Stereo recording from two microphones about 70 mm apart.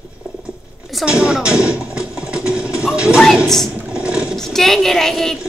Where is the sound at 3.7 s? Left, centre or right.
Centre.